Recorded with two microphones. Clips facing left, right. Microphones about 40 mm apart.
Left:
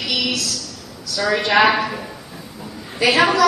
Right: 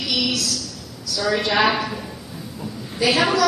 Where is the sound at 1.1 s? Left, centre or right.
Centre.